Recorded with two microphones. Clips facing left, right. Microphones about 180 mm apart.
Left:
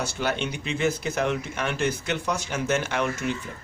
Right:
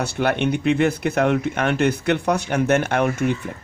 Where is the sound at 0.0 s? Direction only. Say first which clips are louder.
Right 7 dB; 60° right (ahead or behind).